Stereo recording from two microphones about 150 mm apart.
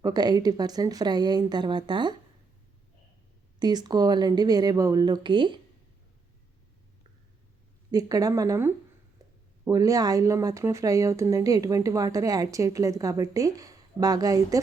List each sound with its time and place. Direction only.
0.0 s speech: 25° right (ahead or behind)
3.6 s speech: 30° right (ahead or behind)
7.9 s speech: 25° right (ahead or behind)